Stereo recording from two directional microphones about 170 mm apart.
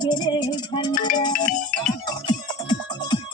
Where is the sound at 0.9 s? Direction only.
50° left (ahead or behind).